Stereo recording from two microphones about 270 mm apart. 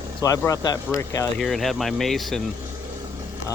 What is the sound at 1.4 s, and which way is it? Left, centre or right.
Speech, centre.